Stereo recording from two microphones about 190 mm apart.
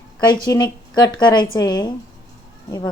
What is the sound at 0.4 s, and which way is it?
Speech, 20° left (ahead or behind).